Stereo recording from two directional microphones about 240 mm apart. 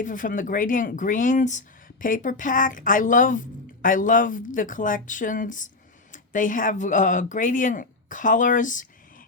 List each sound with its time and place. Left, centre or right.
0.0 s speech: left